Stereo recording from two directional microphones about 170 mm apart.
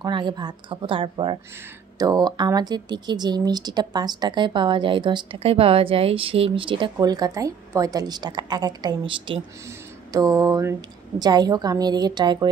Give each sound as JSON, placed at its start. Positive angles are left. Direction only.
{"t": 0.0, "sound": "speech", "side_deg": -25}